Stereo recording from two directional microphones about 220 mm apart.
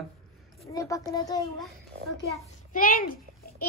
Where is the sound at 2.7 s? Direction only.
40° left (ahead or behind).